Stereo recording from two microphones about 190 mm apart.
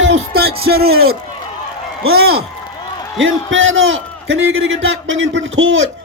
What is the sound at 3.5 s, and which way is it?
A man's voice, 90° right.